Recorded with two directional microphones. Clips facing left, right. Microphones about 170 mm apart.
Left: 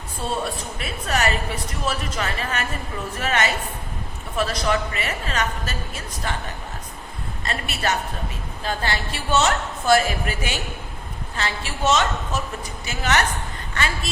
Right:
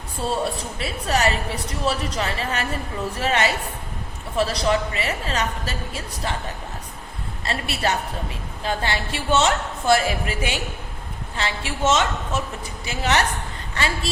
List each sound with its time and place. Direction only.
0.8 s a woman's voice: 35° right (ahead or behind)
7.4 s a woman's voice: 30° right (ahead or behind)